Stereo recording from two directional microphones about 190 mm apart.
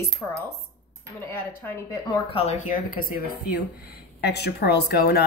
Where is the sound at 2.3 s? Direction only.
35° left (ahead or behind).